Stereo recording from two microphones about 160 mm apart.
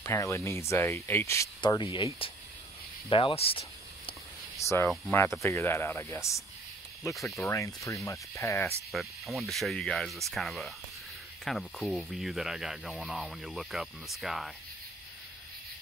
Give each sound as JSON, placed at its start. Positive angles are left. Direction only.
{"t": 0.0, "sound": "speech", "side_deg": 20}
{"t": 3.1, "sound": "speech", "side_deg": 35}
{"t": 4.6, "sound": "speech", "side_deg": 20}
{"t": 8.9, "sound": "speech", "side_deg": 0}